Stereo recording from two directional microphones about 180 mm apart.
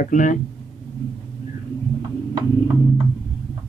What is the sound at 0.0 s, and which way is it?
Speech, 45° left (ahead or behind).